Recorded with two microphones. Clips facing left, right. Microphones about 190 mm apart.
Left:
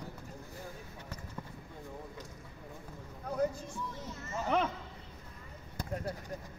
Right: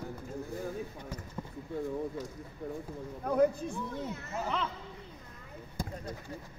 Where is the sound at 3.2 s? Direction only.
60° right (ahead or behind).